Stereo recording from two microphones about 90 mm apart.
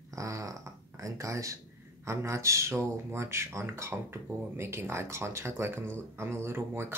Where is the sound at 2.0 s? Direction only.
30° right (ahead or behind).